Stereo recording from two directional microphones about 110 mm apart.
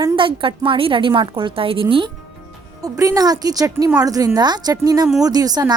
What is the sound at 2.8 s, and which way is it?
Speech, 30° right (ahead or behind).